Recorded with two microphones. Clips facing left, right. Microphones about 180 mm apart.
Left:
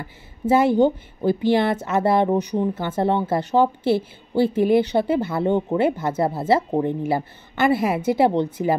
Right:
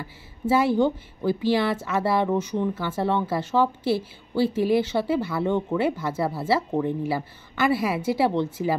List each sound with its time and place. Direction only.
0.5 s a woman's voice: 20° left (ahead or behind)